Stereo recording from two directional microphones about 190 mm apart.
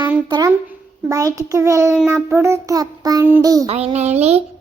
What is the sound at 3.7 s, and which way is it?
Speech, 35° right (ahead or behind).